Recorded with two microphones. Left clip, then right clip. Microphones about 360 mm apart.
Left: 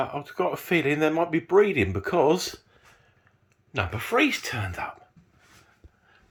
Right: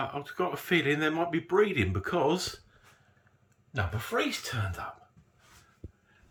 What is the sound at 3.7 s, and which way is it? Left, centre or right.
Speech, centre.